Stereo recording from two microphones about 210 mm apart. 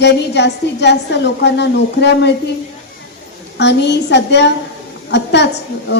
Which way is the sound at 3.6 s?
55° left (ahead or behind).